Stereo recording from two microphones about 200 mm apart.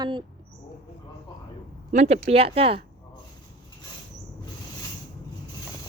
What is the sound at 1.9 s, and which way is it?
Speech, 35° right (ahead or behind).